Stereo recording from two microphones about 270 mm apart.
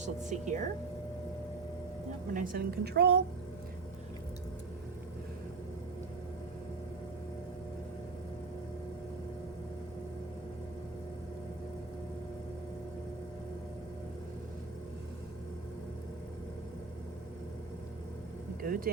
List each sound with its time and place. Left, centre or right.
0.0 s speech: right
2.3 s a woman's voice: right
18.6 s vehicle: right